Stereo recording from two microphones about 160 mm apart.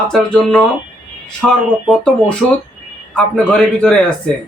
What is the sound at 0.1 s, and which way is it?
Speech, 5° left (ahead or behind).